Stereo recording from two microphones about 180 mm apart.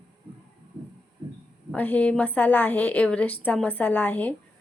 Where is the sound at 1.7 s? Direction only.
10° left (ahead or behind).